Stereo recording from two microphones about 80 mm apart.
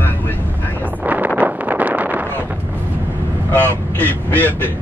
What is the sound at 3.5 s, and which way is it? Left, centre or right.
Speech, left.